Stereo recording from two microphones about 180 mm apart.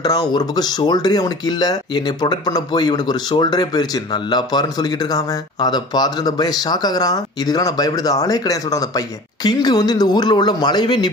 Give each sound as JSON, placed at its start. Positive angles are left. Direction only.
{"t": 0.0, "sound": "speech", "side_deg": 20}